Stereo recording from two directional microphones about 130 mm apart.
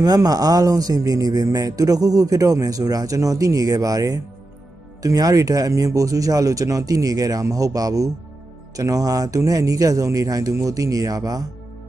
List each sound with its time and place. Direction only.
0.0 s speech: 30° right (ahead or behind)